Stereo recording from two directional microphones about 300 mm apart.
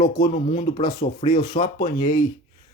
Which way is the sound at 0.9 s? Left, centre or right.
Left.